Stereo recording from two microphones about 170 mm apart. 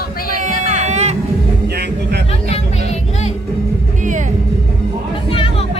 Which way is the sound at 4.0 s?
50° right (ahead or behind).